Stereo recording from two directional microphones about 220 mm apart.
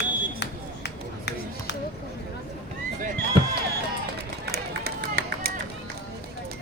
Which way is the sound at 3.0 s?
45° right (ahead or behind).